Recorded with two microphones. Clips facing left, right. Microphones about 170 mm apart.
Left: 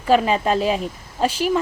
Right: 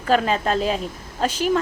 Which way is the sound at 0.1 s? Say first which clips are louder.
Left 2 dB; 5° left (ahead or behind).